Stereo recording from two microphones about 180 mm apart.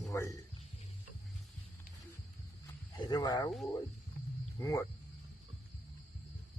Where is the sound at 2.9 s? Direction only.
25° left (ahead or behind).